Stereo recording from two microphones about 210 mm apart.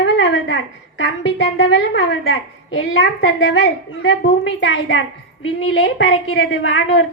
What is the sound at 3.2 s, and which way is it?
A woman's voice, 60° left (ahead or behind).